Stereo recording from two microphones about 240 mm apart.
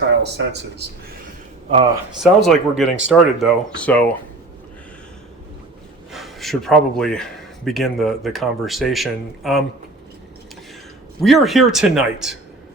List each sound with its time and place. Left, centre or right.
0.2 s speech: right
2.2 s a man's voice: centre
6.1 s a man's voice: centre
11.2 s a man's voice: centre